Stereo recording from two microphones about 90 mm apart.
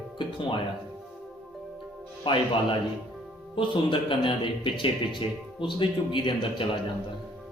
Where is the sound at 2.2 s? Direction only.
70° left (ahead or behind).